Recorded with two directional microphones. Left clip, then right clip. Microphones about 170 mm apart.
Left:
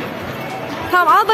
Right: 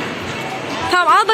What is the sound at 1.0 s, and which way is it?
Speech, 10° right (ahead or behind).